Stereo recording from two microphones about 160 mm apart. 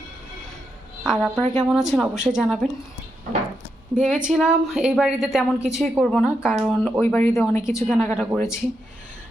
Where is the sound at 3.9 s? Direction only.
5° right (ahead or behind).